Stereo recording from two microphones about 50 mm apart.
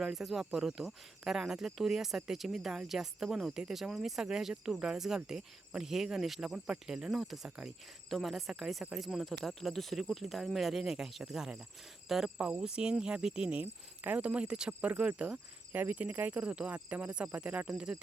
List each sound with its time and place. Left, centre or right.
0.0 s speech: centre
13.5 s speech: right
17.7 s speech: centre